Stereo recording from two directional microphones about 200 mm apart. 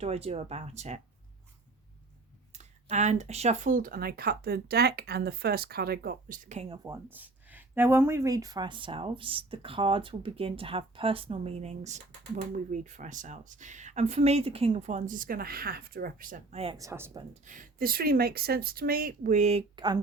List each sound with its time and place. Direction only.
0.0 s speech: 30° right (ahead or behind)
2.9 s speech: 35° right (ahead or behind)
6.8 s speech: 10° right (ahead or behind); by 16.6 s 45° right (ahead or behind)
16.7 s speech: 15° right (ahead or behind)
17.4 s speech: 40° right (ahead or behind)